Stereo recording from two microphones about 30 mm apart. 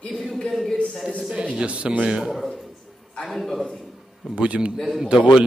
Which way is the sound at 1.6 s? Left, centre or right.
Right.